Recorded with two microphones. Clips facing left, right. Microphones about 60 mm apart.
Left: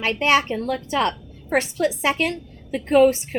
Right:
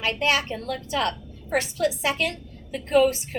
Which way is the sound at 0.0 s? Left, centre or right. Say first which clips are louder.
Left 5 dB; left.